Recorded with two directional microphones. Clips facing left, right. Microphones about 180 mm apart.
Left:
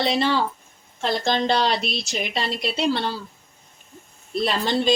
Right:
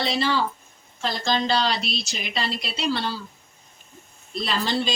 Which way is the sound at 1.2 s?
55° left (ahead or behind).